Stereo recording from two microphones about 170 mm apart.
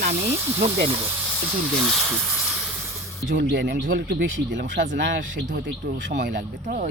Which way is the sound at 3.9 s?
75° right (ahead or behind).